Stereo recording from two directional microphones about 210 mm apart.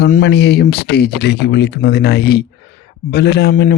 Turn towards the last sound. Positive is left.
turn(degrees=50)  # may be behind; listen again after turning